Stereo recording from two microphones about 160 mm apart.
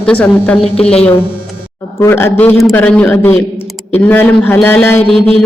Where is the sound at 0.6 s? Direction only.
40° left (ahead or behind).